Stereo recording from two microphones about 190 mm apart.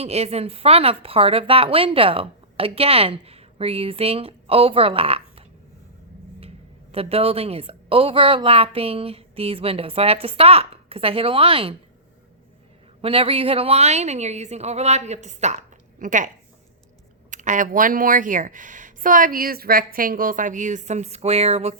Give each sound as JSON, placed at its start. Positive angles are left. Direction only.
{"t": 0.0, "sound": "speech", "side_deg": -35}
{"t": 6.9, "sound": "a woman's voice", "side_deg": -30}
{"t": 13.0, "sound": "speech", "side_deg": -30}
{"t": 17.3, "sound": "a woman's voice", "side_deg": -40}